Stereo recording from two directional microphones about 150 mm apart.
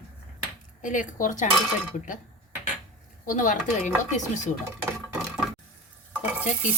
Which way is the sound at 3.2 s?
60° left (ahead or behind).